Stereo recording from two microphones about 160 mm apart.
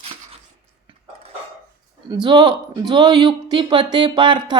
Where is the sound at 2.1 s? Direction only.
30° right (ahead or behind).